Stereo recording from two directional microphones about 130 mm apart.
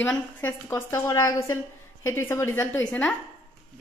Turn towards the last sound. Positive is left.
turn(degrees=10)  # may be behind; listen again after turning